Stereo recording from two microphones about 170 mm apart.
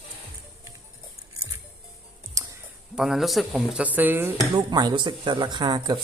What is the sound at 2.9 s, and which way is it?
Speech, centre (ahead or behind).